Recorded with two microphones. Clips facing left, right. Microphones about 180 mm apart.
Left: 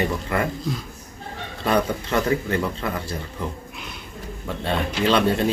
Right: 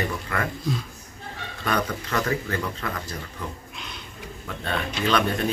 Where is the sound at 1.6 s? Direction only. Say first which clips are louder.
Left 5 dB; 25° left (ahead or behind).